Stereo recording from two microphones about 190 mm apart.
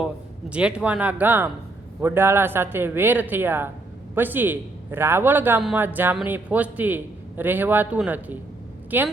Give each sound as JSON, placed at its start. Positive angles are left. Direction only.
{"t": 0.5, "sound": "a man's voice", "side_deg": -5}